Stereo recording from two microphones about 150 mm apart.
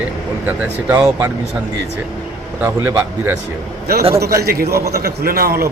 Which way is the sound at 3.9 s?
90° right.